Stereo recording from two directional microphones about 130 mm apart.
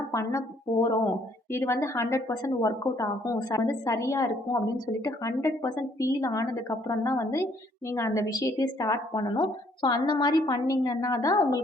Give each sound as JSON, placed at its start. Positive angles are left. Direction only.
{"t": 0.1, "sound": "a woman's voice", "side_deg": 25}